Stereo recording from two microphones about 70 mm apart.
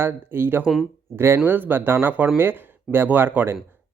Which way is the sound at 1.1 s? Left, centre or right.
Right.